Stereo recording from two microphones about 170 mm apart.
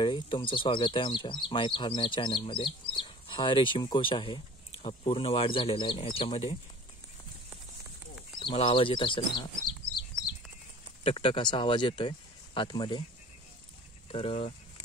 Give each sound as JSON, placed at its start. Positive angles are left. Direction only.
{"t": 0.0, "sound": "speech", "side_deg": 25}
{"t": 8.4, "sound": "speech", "side_deg": 30}
{"t": 11.1, "sound": "speech", "side_deg": 30}
{"t": 14.0, "sound": "speech", "side_deg": 35}